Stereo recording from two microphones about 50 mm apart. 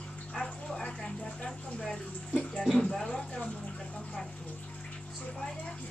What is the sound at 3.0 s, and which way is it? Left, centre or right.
Speech, centre.